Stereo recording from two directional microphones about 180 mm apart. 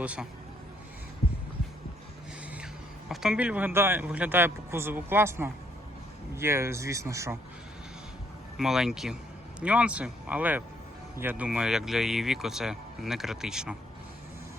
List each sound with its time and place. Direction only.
0.0 s speech: 5° right (ahead or behind)
3.1 s speech: 5° right (ahead or behind)
8.5 s speech: centre (ahead or behind)